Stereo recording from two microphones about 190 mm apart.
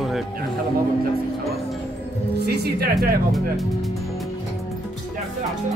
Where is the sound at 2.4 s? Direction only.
60° right (ahead or behind).